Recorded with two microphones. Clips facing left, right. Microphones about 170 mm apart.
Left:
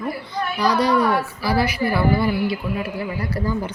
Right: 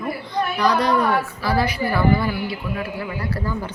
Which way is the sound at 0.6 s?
10° left (ahead or behind).